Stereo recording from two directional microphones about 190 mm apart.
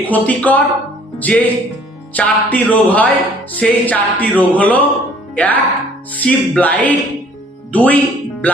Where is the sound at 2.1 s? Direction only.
10° left (ahead or behind).